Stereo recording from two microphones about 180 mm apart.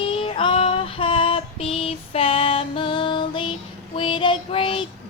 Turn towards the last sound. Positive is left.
turn(degrees=30)  # may be behind; listen again after turning